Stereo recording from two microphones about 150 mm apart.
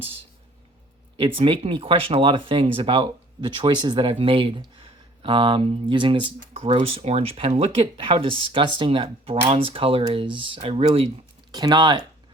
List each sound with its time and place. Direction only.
1.4 s speech: 40° right (ahead or behind)
11.5 s speech: 25° right (ahead or behind)